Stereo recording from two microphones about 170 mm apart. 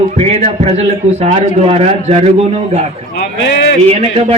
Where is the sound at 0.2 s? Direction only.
40° right (ahead or behind).